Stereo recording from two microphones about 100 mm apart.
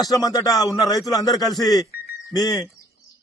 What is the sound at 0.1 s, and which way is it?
A man's voice, 35° left (ahead or behind).